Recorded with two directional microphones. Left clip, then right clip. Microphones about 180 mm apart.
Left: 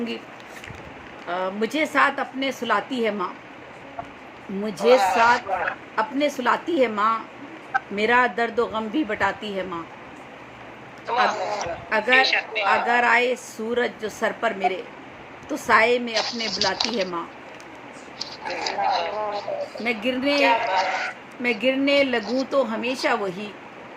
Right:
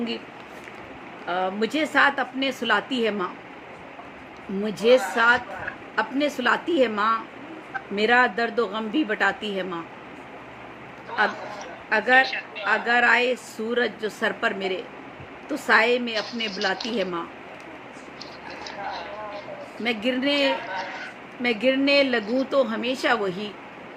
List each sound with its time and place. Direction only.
1.3 s a woman's voice: 5° right (ahead or behind)
4.6 s a woman's voice: 5° right (ahead or behind)
11.3 s a man's voice: 40° left (ahead or behind)
11.9 s speech: 5° right (ahead or behind)
12.2 s speech: 40° left (ahead or behind)
12.7 s a woman's voice: 5° right (ahead or behind)
16.1 s speech: 40° left (ahead or behind)
18.2 s a sound: 40° left (ahead or behind)
19.8 s speech: 10° right (ahead or behind)
20.3 s a man's voice: 40° left (ahead or behind)
21.4 s a woman's voice: 5° right (ahead or behind)
22.2 s speech: 40° left (ahead or behind)
22.4 s a woman's voice: 5° right (ahead or behind)